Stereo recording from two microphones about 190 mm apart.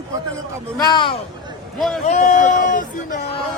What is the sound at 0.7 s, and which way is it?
Speech, 20° left (ahead or behind).